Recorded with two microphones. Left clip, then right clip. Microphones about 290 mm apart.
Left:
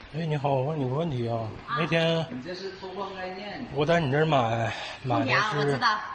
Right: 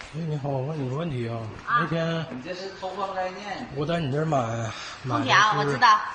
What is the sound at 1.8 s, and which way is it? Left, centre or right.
Speech, left.